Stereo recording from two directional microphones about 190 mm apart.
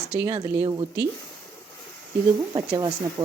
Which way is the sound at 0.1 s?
10° right (ahead or behind).